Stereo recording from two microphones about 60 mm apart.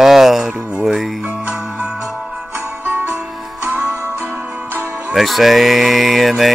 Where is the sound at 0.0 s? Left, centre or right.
Centre.